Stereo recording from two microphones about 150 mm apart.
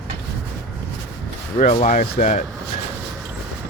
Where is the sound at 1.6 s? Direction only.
50° left (ahead or behind).